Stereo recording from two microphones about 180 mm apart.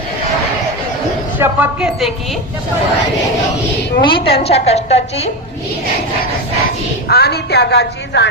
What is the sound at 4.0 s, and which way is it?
A woman's voice, 30° left (ahead or behind).